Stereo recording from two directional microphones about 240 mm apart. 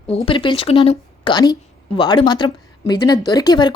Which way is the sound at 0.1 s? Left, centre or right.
Left.